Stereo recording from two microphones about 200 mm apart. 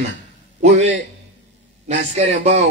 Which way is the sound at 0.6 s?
35° right (ahead or behind).